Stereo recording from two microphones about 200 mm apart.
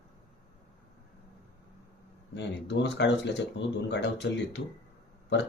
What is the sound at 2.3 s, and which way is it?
Speech, 60° left (ahead or behind).